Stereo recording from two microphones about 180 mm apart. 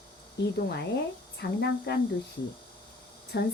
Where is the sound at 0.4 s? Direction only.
65° left (ahead or behind).